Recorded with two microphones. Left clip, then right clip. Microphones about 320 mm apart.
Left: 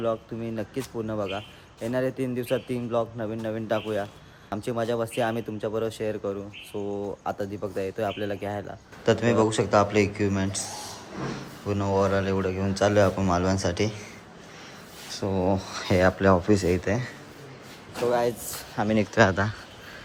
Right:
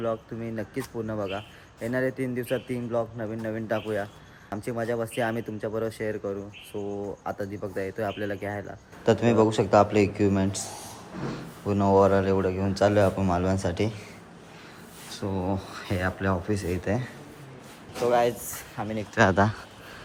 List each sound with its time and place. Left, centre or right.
0.0 s a man's voice: centre
15.1 s a man's voice: centre
18.8 s speech: left
19.1 s a man's voice: centre